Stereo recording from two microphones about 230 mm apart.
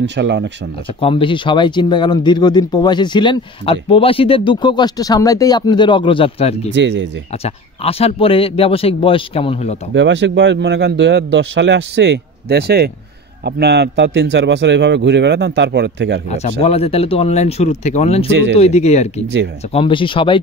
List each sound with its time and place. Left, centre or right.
0.0 s speech: right
1.0 s speech: left
6.7 s speech: right
7.4 s speech: left
9.9 s speech: right
16.3 s speech: left